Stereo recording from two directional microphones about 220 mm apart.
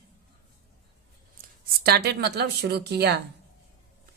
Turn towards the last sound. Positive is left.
turn(degrees=-50)  # may be behind; listen again after turning